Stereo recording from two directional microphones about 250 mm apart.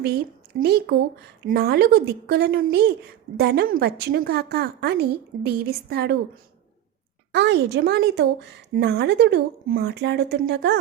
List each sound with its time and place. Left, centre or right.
0.6 s a woman's voice: right
7.3 s a woman's voice: right